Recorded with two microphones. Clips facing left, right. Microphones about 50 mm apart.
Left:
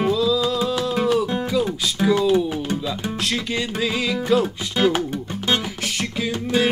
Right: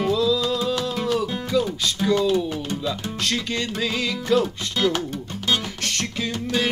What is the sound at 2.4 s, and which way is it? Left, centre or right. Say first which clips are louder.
Music: left 3 dB; centre.